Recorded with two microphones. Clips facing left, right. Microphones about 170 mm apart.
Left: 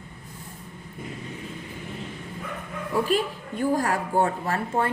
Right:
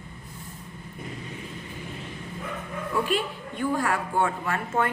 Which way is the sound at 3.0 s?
40° left (ahead or behind).